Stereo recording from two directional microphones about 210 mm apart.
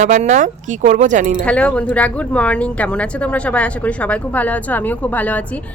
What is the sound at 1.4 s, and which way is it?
Speech, 5° left (ahead or behind).